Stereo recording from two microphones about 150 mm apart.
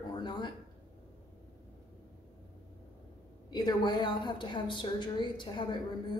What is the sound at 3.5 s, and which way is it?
A woman's voice, 30° left (ahead or behind).